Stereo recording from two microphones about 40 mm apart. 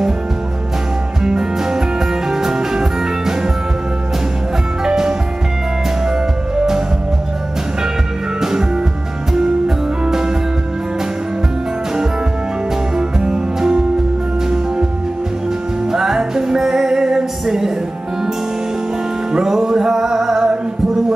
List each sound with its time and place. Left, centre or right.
1.2 s music: centre
4.8 s music: centre
8.4 s music: centre
12.9 s music: centre
15.9 s music: centre
19.3 s music: centre